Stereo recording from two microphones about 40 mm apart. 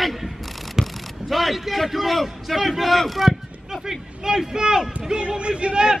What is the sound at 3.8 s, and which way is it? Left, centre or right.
Speech, centre.